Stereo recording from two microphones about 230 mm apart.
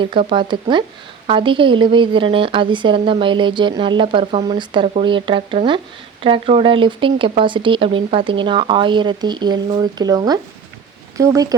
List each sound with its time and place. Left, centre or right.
0.0 s a woman's voice: right